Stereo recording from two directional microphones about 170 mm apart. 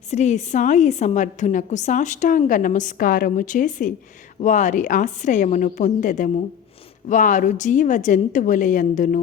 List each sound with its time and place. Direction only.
0.1 s a woman's voice: 45° left (ahead or behind)